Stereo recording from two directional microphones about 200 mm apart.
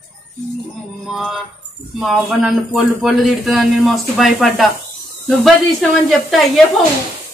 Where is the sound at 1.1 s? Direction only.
Centre (ahead or behind).